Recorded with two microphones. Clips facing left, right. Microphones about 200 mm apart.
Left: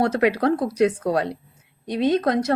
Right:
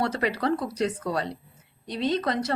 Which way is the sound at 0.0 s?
55° left (ahead or behind).